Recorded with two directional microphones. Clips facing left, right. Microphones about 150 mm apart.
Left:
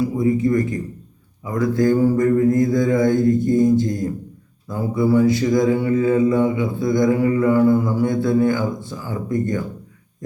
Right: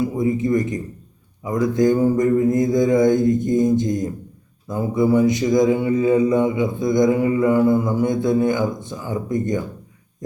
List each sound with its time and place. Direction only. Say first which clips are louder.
0.0 s speech: left 2 dB; 20° right (ahead or behind)
1.5 s mantra: even; 20° right (ahead or behind)